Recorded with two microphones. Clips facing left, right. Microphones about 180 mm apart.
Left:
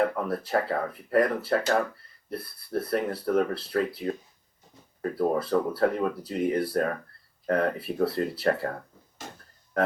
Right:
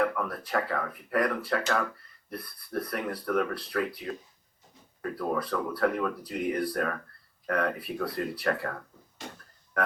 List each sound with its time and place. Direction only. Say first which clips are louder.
0.0 s speech: left 2 dB; 30° left (ahead or behind)